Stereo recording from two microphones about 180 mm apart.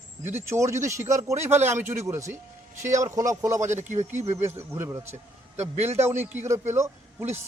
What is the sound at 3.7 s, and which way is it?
Speech, 40° right (ahead or behind).